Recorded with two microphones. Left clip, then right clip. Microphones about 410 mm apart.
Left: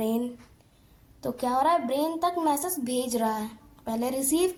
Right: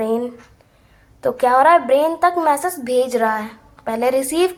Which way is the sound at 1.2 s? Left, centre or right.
Left.